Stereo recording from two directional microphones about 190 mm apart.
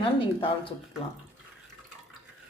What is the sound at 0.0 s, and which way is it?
Speech, 25° left (ahead or behind).